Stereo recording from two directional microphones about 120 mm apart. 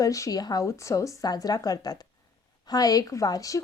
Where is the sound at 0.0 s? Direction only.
30° left (ahead or behind).